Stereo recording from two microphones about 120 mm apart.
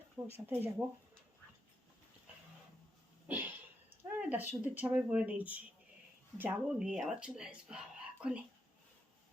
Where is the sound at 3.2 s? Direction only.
15° right (ahead or behind).